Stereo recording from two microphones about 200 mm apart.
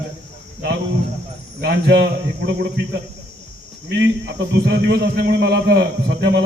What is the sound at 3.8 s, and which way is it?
Speech, 60° right (ahead or behind).